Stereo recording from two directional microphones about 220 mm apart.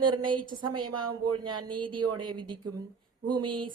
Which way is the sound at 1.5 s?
20° right (ahead or behind).